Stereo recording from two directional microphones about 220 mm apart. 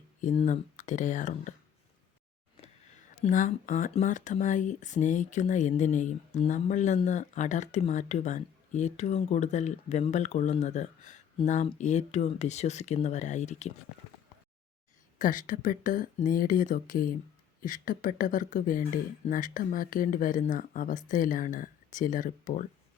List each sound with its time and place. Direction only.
0.2 s speech: 35° left (ahead or behind)
3.2 s speech: 35° left (ahead or behind)
15.2 s speech: 35° left (ahead or behind)